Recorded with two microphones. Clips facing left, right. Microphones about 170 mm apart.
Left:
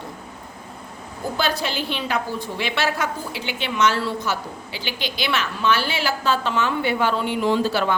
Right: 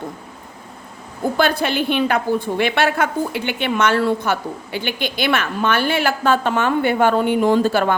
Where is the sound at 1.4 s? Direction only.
55° right (ahead or behind).